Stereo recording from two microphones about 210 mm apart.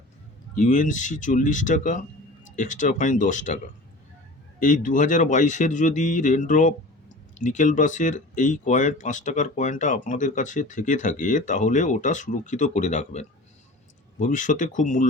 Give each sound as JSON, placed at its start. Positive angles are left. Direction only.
{"t": 0.5, "sound": "speech", "side_deg": 40}
{"t": 4.6, "sound": "speech", "side_deg": 40}